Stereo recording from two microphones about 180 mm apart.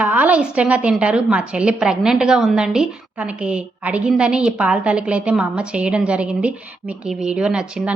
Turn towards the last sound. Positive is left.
turn(degrees=-5)  # may be behind; listen again after turning